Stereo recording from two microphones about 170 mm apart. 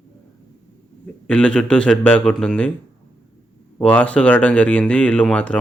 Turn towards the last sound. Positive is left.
turn(degrees=5)  # may be behind; listen again after turning